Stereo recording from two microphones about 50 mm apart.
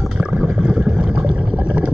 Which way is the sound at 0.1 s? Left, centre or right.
Right.